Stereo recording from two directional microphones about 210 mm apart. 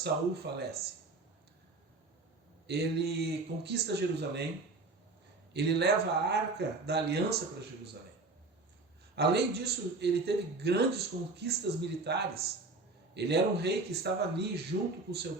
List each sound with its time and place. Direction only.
0.0 s a man's voice: 50° right (ahead or behind)
2.6 s a man's voice: 50° right (ahead or behind)
5.5 s a man's voice: 55° right (ahead or behind)
9.1 s a man's voice: 50° right (ahead or behind)